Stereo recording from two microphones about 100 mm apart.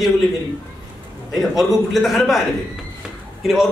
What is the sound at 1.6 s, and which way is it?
Speech, centre (ahead or behind).